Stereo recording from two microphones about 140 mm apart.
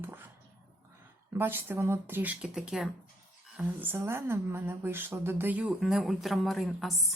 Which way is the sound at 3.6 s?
15° right (ahead or behind).